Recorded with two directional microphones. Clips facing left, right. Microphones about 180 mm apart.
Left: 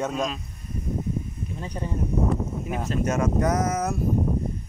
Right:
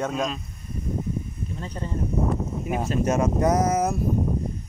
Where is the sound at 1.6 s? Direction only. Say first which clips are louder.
Left 1 dB; 15° left (ahead or behind).